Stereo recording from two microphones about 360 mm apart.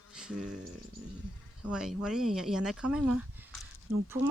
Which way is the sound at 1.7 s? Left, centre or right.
Centre.